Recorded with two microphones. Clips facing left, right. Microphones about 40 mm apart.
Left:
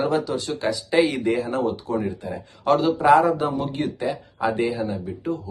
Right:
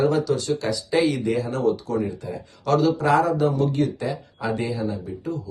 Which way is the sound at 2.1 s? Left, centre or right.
Left.